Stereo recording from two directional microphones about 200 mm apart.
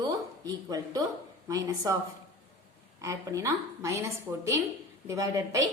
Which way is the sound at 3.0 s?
15° right (ahead or behind).